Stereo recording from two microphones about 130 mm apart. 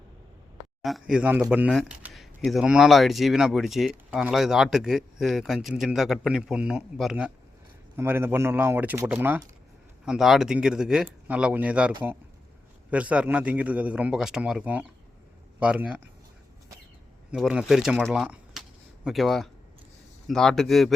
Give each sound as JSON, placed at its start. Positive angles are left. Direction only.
{"t": 0.8, "sound": "a man's voice", "side_deg": 0}
{"t": 7.9, "sound": "a man's voice", "side_deg": -15}
{"t": 17.3, "sound": "speech", "side_deg": 0}